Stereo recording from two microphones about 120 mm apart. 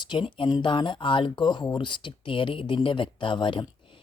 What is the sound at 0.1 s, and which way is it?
Speech, 45° left (ahead or behind).